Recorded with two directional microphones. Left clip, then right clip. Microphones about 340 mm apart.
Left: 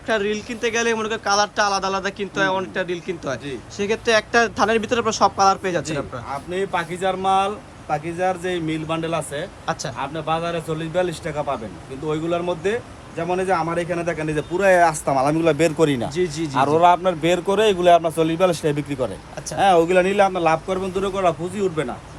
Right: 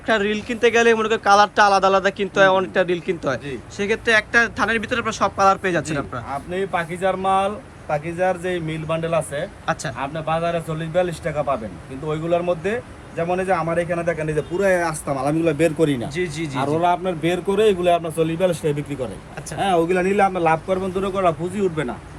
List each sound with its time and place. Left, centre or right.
0.1 s a man's voice: centre